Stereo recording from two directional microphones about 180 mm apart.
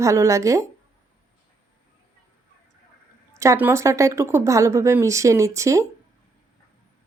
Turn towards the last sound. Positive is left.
turn(degrees=-15)  # may be behind; listen again after turning